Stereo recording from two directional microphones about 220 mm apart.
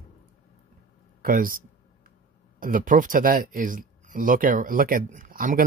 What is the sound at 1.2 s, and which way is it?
Speech, 40° right (ahead or behind).